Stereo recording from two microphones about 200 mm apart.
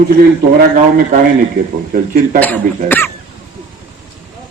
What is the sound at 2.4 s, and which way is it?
Speech, 10° left (ahead or behind).